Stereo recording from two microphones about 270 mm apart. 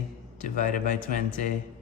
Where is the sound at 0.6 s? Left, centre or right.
Left.